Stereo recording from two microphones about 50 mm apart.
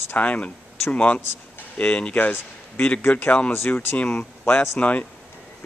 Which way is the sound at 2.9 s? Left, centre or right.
Left.